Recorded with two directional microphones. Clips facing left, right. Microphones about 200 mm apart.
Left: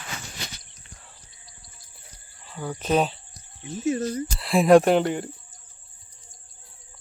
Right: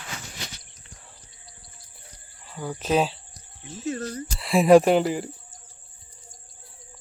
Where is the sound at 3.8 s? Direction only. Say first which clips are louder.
Left 5 dB; 20° left (ahead or behind).